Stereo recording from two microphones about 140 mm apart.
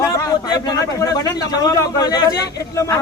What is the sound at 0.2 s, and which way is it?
A man's voice, 25° left (ahead or behind).